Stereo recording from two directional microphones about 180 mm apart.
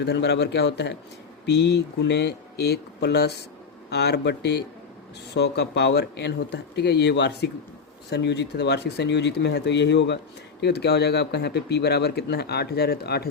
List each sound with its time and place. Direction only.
0.0 s speech: 70° left (ahead or behind)